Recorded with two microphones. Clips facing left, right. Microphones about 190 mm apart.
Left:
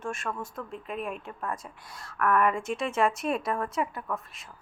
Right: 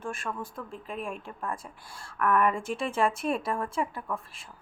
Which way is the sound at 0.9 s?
Centre (ahead or behind).